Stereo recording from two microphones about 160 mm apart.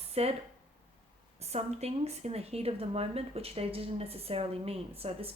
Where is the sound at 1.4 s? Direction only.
40° right (ahead or behind).